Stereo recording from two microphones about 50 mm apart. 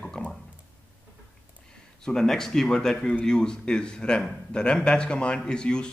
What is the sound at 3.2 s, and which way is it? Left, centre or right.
A man's voice, centre.